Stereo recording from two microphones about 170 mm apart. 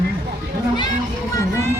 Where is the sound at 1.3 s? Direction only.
15° left (ahead or behind).